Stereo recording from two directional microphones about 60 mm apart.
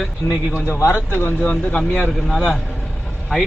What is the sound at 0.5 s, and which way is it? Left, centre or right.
Speech, left.